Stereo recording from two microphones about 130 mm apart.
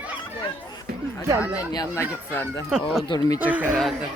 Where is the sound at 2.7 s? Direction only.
5° right (ahead or behind).